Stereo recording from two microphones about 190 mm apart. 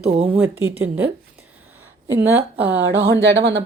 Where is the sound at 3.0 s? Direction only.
65° right (ahead or behind).